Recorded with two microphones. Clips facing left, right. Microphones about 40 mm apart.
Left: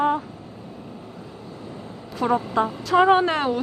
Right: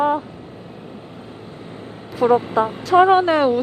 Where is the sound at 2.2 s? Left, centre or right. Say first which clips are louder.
Right 5 dB; centre.